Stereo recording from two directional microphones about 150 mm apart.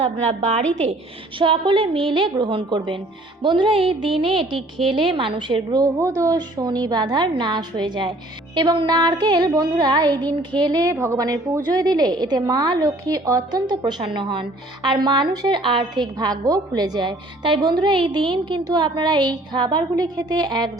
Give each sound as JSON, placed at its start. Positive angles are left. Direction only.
{"t": 0.0, "sound": "a woman's voice", "side_deg": -45}
{"t": 1.4, "sound": "a woman's voice", "side_deg": -35}